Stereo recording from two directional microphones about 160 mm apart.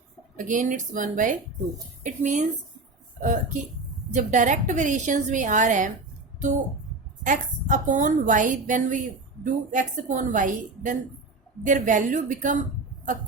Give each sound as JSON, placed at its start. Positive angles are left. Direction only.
{"t": 0.3, "sound": "a woman's voice", "side_deg": -50}
{"t": 7.3, "sound": "a woman's voice", "side_deg": -55}